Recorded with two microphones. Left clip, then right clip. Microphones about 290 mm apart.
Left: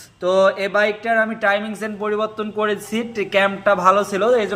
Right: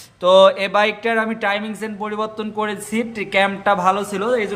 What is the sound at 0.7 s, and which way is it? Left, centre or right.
Speech, centre.